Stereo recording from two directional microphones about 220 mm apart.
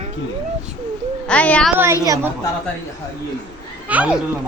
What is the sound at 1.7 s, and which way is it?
Speech, 10° right (ahead or behind).